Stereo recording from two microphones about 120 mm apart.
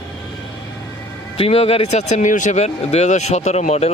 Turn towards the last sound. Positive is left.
turn(degrees=65)  # may be behind; listen again after turning